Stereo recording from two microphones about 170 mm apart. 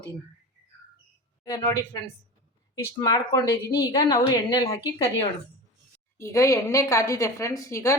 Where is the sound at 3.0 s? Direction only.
20° left (ahead or behind).